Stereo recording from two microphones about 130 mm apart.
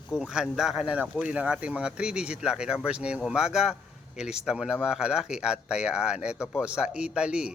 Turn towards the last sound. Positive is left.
turn(degrees=-10)  # may be behind; listen again after turning